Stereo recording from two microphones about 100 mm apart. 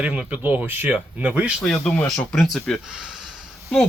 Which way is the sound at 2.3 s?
Centre (ahead or behind).